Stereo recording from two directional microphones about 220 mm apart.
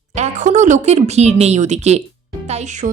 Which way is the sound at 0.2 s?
35° right (ahead or behind).